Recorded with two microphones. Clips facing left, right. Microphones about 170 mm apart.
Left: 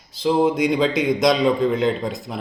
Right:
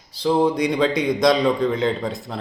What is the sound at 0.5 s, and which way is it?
A man's voice, centre (ahead or behind).